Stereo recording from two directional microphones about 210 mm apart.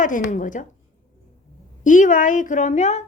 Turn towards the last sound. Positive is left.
turn(degrees=35)  # may be behind; listen again after turning